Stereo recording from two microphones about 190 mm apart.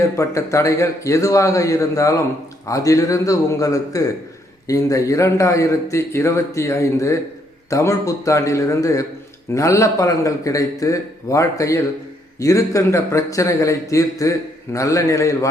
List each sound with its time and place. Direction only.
0.0 s a man's voice: 15° left (ahead or behind)